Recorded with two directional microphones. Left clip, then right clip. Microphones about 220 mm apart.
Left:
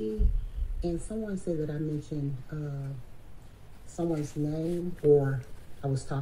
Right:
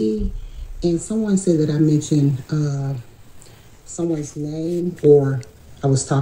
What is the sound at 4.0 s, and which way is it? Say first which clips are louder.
Speech: right 8 dB; 20° right (ahead or behind).